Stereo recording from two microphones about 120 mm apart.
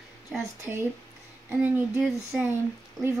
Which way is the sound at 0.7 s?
15° right (ahead or behind).